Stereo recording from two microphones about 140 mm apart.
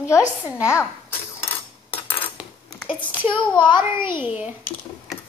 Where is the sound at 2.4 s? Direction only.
10° right (ahead or behind).